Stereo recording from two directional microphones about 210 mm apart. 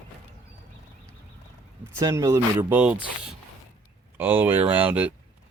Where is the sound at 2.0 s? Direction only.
15° right (ahead or behind).